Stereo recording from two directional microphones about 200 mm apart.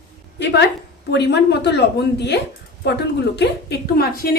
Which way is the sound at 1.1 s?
60° left (ahead or behind).